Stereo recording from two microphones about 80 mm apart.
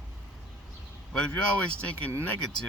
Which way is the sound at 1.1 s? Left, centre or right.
Centre.